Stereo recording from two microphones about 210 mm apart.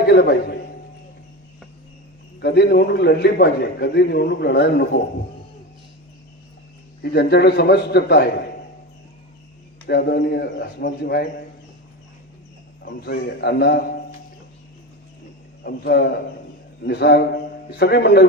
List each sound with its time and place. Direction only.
0.1 s a man's voice: 50° left (ahead or behind)
2.4 s a man's voice: 50° left (ahead or behind)
7.0 s a man's voice: 55° left (ahead or behind)
9.8 s a man's voice: 50° left (ahead or behind)
12.8 s a man's voice: 50° left (ahead or behind)
15.6 s a man's voice: 50° left (ahead or behind)